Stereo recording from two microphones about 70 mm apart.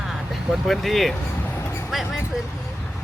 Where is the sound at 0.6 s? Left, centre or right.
Centre.